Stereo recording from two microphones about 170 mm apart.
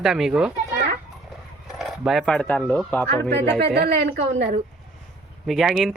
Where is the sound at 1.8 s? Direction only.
Centre (ahead or behind).